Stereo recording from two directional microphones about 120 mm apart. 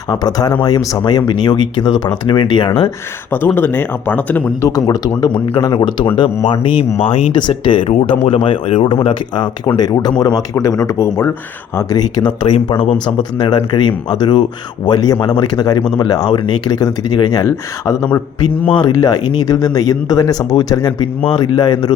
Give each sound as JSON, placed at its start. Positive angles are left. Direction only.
{"t": 0.1, "sound": "speech", "side_deg": 35}
{"t": 3.3, "sound": "speech", "side_deg": 15}
{"t": 4.4, "sound": "speech", "side_deg": 30}
{"t": 11.8, "sound": "speech", "side_deg": 30}
{"t": 12.5, "sound": "speech", "side_deg": 50}
{"t": 17.4, "sound": "speech", "side_deg": 25}